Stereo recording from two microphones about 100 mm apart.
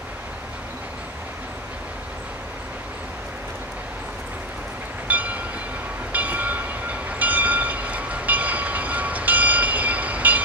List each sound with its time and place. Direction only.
5.0 s train: 15° right (ahead or behind)